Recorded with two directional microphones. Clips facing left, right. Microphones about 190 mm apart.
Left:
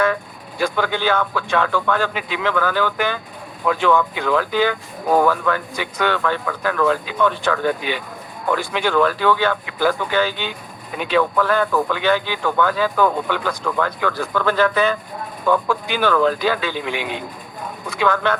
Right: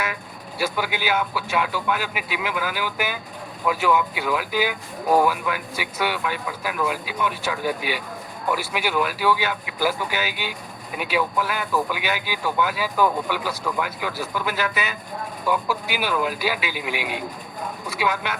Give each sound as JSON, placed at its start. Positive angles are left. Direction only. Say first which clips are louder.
{"t": 0.6, "sound": "speech", "louder": "left 5 dB", "side_deg": -10}